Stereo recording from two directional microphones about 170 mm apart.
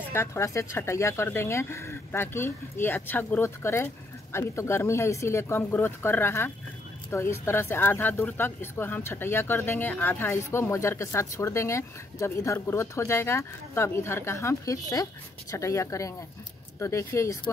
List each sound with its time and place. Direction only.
0.1 s speech: 15° left (ahead or behind)